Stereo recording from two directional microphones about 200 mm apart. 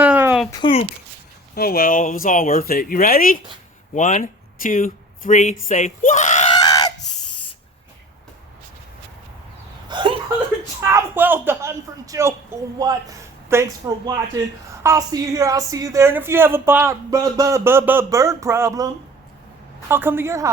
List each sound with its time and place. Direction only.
0.0 s a sound: 10° right (ahead or behind)
0.5 s speech: 25° left (ahead or behind)
1.5 s speech: 50° left (ahead or behind)
6.5 s screaming: 20° left (ahead or behind)
9.9 s chuckle: 25° right (ahead or behind)
10.9 s a woman's voice: 10° right (ahead or behind)
19.9 s a woman's voice: 10° right (ahead or behind)